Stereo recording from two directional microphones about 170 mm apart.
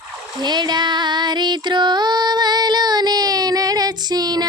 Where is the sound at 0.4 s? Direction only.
25° right (ahead or behind).